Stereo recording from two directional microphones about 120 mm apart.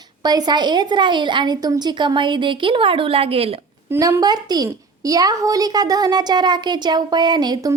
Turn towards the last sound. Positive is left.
turn(degrees=-35)  # may be behind; listen again after turning